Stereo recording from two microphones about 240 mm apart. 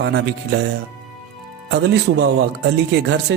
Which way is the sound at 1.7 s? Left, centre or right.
Right.